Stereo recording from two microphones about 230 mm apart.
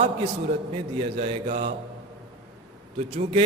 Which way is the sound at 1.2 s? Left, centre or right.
Right.